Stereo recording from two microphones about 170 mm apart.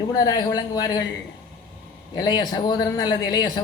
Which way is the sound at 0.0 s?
25° left (ahead or behind).